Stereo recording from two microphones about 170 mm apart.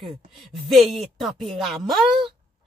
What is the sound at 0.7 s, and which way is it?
Speech, centre (ahead or behind).